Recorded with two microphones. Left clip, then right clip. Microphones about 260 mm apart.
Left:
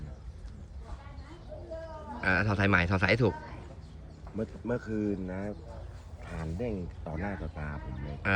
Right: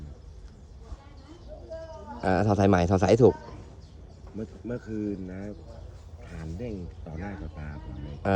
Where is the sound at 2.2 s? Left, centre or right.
Centre.